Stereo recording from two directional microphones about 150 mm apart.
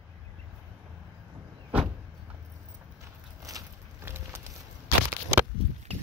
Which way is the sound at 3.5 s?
25° right (ahead or behind).